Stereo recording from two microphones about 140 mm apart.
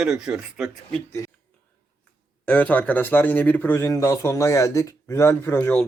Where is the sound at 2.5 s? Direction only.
10° left (ahead or behind).